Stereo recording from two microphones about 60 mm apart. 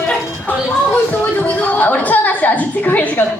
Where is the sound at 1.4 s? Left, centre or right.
Left.